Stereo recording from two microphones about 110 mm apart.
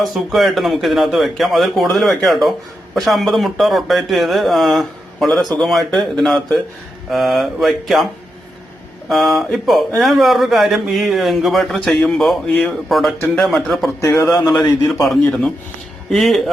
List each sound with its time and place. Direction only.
0.0 s a man's voice: centre (ahead or behind)
9.0 s a man's voice: centre (ahead or behind)
14.0 s a man's voice: 25° left (ahead or behind)
14.8 s a man's voice: centre (ahead or behind)